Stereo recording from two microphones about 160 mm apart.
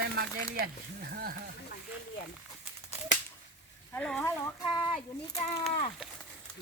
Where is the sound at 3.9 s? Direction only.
5° left (ahead or behind).